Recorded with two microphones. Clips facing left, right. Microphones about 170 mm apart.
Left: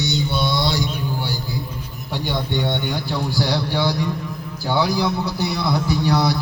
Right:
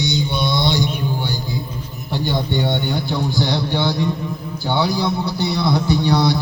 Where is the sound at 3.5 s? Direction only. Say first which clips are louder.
Right 1 dB; 20° right (ahead or behind).